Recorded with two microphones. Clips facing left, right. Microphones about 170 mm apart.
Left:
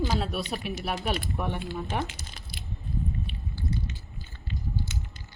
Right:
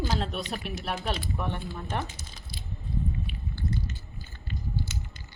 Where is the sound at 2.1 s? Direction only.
70° left (ahead or behind).